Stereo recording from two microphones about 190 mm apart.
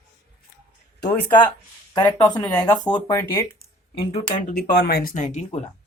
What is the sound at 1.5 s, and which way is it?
Speech, 20° left (ahead or behind).